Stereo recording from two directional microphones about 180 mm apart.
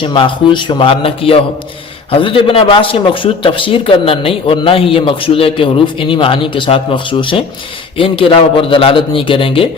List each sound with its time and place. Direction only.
0.0 s a man's voice: 25° left (ahead or behind)